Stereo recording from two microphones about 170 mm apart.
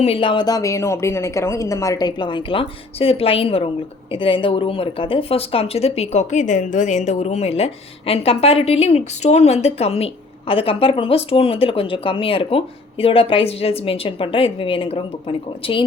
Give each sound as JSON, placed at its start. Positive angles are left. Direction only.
{"t": 0.0, "sound": "a woman's voice", "side_deg": 35}